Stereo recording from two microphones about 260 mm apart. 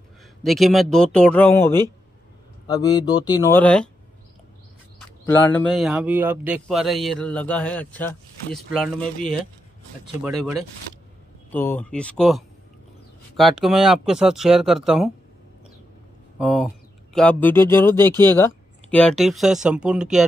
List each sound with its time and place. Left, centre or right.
0.4 s a man's voice: centre
5.2 s a man's voice: centre
16.3 s a man's voice: centre